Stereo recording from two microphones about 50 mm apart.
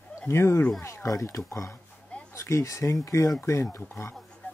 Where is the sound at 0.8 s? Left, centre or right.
Left.